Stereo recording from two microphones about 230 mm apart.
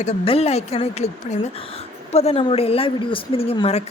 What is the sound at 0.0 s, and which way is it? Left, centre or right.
Speech, left.